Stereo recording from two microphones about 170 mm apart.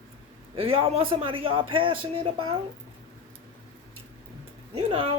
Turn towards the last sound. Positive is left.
turn(degrees=-35)  # may be behind; listen again after turning